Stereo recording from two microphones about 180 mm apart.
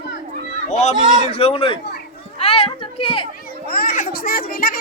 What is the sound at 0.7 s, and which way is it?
Speech, 40° left (ahead or behind).